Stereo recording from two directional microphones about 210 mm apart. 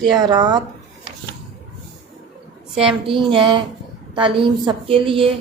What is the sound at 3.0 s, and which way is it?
A woman's voice, 25° right (ahead or behind).